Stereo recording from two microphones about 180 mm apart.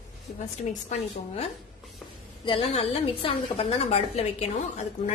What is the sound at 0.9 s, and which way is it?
Speech, 40° left (ahead or behind).